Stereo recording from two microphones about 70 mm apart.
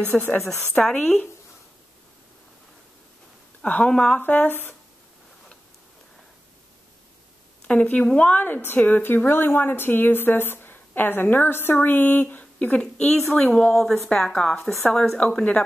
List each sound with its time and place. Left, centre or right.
0.2 s a woman's voice: left
0.9 s a woman's voice: centre
3.6 s a woman's voice: centre
4.3 s a woman's voice: left
7.6 s a woman's voice: centre